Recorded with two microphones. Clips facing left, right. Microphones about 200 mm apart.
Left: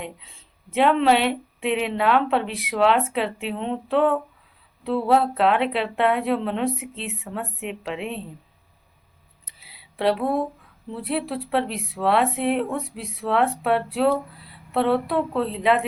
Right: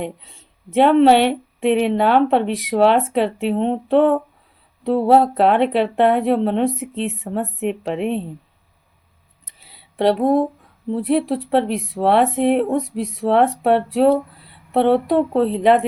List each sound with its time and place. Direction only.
0.7 s speech: 40° right (ahead or behind)
9.6 s a sound: 40° right (ahead or behind)
10.9 s speech: 40° right (ahead or behind)